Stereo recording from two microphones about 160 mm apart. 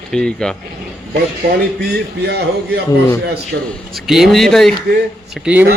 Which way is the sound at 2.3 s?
90° right.